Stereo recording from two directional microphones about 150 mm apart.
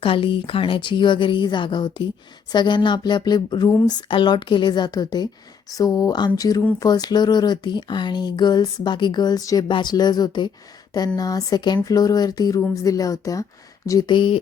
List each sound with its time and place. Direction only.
0.0 s speech: 35° left (ahead or behind)